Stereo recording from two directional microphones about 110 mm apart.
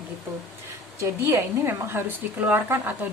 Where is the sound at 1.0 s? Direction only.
25° right (ahead or behind).